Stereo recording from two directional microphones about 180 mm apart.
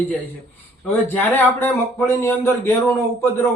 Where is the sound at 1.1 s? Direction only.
10° left (ahead or behind).